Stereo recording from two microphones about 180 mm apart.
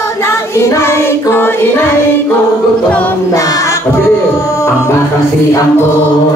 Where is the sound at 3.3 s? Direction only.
20° left (ahead or behind).